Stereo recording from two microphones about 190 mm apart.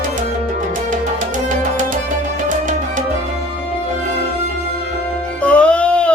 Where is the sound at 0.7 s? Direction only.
40° right (ahead or behind).